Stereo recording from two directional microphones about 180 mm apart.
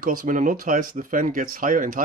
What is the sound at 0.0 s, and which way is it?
Speech, 50° right (ahead or behind).